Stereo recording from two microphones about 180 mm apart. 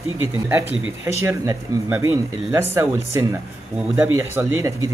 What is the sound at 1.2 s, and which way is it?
A man's voice, 15° right (ahead or behind).